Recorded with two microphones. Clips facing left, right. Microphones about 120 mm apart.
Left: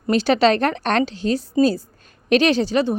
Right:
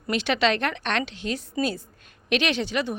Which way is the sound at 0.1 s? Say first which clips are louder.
Left 7 dB; 35° left (ahead or behind).